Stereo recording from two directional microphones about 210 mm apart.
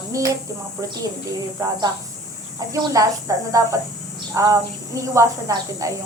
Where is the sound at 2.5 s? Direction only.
15° right (ahead or behind).